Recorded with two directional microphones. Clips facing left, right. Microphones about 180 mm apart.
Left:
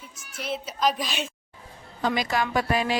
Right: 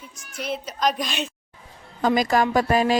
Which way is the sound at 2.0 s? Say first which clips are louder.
Right 6 dB; 45° right (ahead or behind).